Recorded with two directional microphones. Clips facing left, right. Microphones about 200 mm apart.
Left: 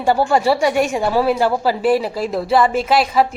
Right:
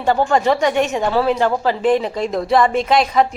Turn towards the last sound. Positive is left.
turn(degrees=5)  # may be behind; listen again after turning